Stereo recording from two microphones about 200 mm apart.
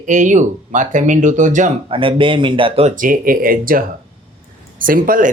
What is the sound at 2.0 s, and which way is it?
Speech, 25° right (ahead or behind).